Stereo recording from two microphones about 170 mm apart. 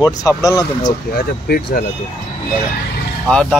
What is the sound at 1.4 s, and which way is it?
Speech, 60° left (ahead or behind).